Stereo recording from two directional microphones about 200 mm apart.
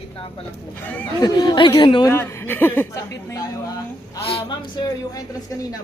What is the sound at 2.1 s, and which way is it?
A woman's voice, 15° left (ahead or behind).